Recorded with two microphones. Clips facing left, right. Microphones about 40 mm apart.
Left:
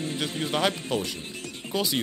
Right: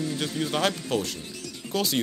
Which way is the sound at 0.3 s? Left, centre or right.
Left.